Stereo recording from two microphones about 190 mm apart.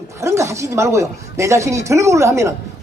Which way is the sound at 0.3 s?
15° right (ahead or behind).